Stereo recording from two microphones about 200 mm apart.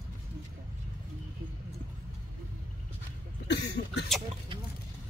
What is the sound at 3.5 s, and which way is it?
Cough, 55° left (ahead or behind).